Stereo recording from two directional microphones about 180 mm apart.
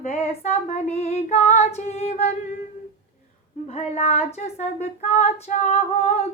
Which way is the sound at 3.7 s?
35° left (ahead or behind).